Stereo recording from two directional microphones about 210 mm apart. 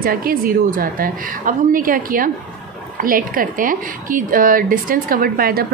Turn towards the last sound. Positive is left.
turn(degrees=-45)  # may be behind; listen again after turning